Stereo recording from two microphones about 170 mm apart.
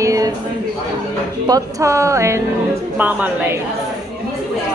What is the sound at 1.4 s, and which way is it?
Speech, 20° right (ahead or behind).